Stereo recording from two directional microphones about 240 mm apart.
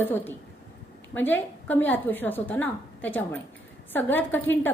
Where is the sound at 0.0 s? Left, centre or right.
Centre.